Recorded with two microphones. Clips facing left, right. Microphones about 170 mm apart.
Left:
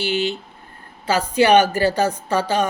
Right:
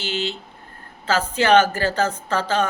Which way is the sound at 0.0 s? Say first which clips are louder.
Left 5 dB; 15° left (ahead or behind).